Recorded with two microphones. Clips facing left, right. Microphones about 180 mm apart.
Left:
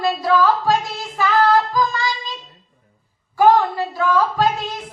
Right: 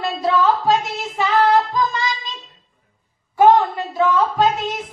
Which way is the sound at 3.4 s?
20° right (ahead or behind).